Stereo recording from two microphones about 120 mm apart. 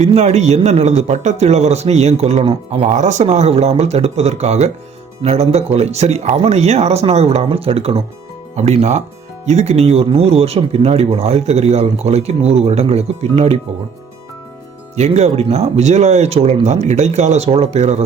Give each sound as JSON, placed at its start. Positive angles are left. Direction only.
{"t": 0.0, "sound": "a man's voice", "side_deg": -60}
{"t": 2.8, "sound": "a man's voice", "side_deg": -75}
{"t": 14.9, "sound": "speech", "side_deg": -65}